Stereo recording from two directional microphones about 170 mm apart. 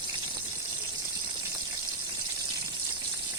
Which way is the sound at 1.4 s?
20° right (ahead or behind).